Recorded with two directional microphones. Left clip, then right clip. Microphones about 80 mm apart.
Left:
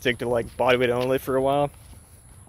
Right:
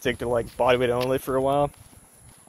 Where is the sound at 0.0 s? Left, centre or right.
Left.